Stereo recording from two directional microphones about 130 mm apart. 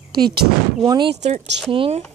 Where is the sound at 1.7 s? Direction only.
45° right (ahead or behind).